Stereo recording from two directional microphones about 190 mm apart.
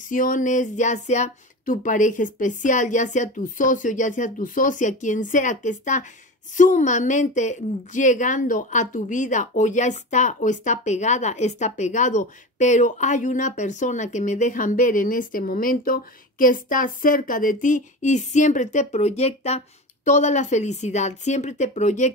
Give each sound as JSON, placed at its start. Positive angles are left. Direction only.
{"t": 0.1, "sound": "a woman's voice", "side_deg": 45}